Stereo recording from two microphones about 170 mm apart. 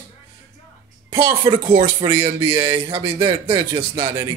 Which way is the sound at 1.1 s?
30° right (ahead or behind).